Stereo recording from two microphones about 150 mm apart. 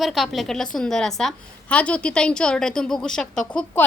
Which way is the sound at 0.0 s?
Centre (ahead or behind).